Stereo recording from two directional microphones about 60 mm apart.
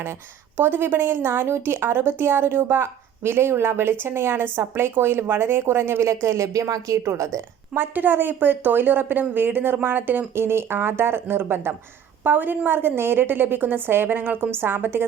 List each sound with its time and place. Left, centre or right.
0.5 s speech: right
7.7 s speech: right